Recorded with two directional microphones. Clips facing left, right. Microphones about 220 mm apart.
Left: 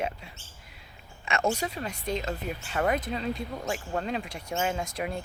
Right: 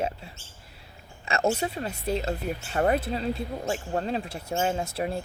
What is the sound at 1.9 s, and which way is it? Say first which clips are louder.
Speech: right 3 dB; 5° right (ahead or behind).